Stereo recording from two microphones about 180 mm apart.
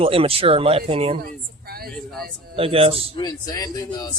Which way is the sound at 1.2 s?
55° right (ahead or behind).